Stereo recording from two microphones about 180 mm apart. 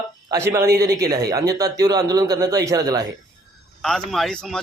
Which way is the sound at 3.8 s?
Centre (ahead or behind).